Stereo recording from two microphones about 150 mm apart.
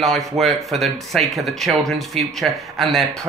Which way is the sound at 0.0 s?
Centre (ahead or behind).